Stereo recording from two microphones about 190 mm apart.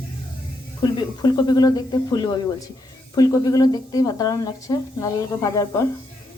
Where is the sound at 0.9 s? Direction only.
20° left (ahead or behind).